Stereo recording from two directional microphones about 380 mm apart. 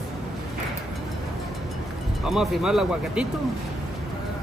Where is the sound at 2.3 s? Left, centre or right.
Centre.